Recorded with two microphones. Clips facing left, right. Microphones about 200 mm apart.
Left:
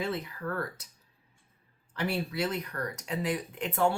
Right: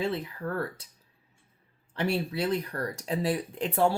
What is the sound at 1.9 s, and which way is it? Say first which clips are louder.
Speech: right 3 dB; 30° right (ahead or behind).